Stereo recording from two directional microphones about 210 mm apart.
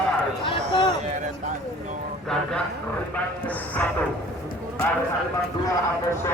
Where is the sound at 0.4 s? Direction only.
20° left (ahead or behind).